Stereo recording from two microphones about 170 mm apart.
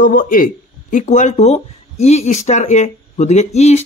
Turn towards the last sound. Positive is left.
turn(degrees=40)  # may be behind; listen again after turning